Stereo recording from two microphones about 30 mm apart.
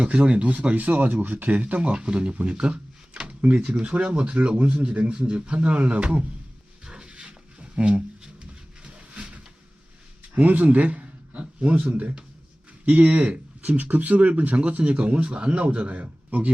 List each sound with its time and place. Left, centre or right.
0.0 s speech: right
0.9 s speech: right
1.5 s speech: right
2.6 s a sound: right
3.2 s a man's voice: right
5.5 s speech: right
6.8 s a sound: right
7.1 s a sound: right
10.4 s speech: right
11.0 s a sound: right
12.8 s speech: right
13.7 s a man's voice: right